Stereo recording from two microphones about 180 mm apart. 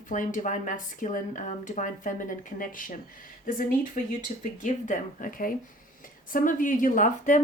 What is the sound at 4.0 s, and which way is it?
Speech, 45° left (ahead or behind).